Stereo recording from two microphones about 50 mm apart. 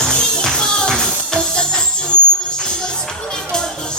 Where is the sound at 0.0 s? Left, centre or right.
Centre.